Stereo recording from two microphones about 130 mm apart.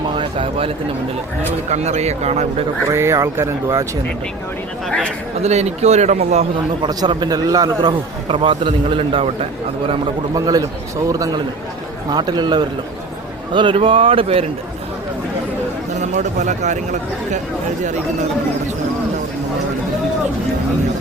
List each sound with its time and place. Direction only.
0.2 s speech: 45° right (ahead or behind)
1.7 s a man's voice: 60° right (ahead or behind)
2.9 s speech: 20° right (ahead or behind)
4.9 s a man's voice: 5° left (ahead or behind)
5.4 s a man's voice: 55° right (ahead or behind)
6.8 s a man's voice: 35° right (ahead or behind)
10.3 s a man's voice: 30° right (ahead or behind); by 14.4 s 45° right (ahead or behind)
16.0 s a man's voice: 65° right (ahead or behind)